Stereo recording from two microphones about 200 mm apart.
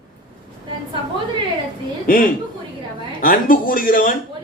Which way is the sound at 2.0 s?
45° left (ahead or behind).